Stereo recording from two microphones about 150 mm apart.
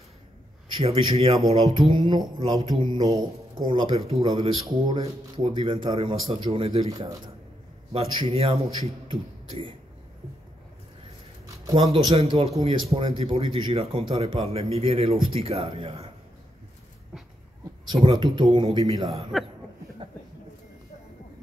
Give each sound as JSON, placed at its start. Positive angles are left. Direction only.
{"t": 0.8, "sound": "speech", "side_deg": -40}
{"t": 1.5, "sound": "mantra", "side_deg": -40}
{"t": 2.0, "sound": "speech", "side_deg": -30}
{"t": 3.9, "sound": "mantra", "side_deg": -45}
{"t": 4.4, "sound": "speech", "side_deg": -30}
{"t": 6.9, "sound": "speech", "side_deg": -25}
{"t": 7.9, "sound": "speech", "side_deg": -40}
{"t": 11.4, "sound": "a sound", "side_deg": -25}
{"t": 11.9, "sound": "speech", "side_deg": -35}
{"t": 17.8, "sound": "speech", "side_deg": -30}
{"t": 19.3, "sound": "speech", "side_deg": 0}